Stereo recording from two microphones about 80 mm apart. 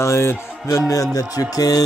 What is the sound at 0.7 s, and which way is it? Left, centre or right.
Speech, left.